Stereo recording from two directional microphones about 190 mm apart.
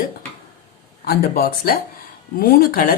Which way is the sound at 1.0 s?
55° left (ahead or behind).